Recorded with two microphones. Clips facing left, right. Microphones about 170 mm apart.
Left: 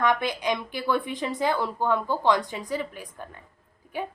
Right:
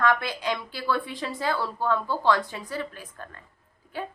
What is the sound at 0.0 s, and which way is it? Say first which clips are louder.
A woman's voice: left 1 dB; 20° left (ahead or behind).